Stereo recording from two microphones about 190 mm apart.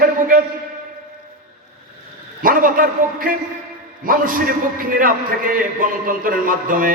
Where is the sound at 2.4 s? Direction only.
45° right (ahead or behind).